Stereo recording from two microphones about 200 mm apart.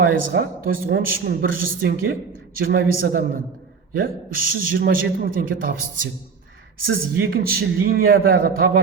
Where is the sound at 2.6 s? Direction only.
50° right (ahead or behind).